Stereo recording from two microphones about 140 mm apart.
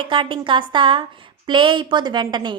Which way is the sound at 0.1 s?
35° right (ahead or behind).